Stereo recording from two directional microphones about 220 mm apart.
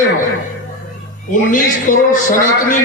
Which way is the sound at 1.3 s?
35° left (ahead or behind).